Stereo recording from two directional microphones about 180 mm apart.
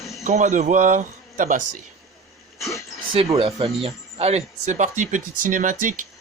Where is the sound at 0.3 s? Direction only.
45° right (ahead or behind).